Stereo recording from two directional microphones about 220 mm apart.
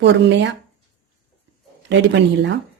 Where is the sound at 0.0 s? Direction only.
55° right (ahead or behind).